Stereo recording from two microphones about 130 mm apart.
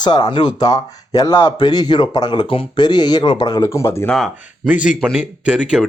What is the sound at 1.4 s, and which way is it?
Speech, 35° left (ahead or behind).